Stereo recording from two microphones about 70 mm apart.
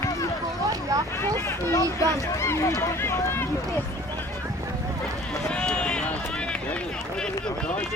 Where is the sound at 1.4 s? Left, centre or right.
Left.